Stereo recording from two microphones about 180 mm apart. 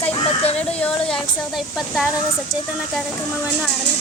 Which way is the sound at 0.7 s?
5° left (ahead or behind).